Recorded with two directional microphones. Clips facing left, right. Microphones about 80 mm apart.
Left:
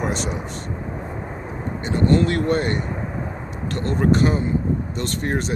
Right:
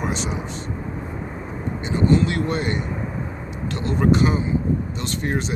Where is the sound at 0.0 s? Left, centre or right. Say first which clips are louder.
Left 1 dB; left.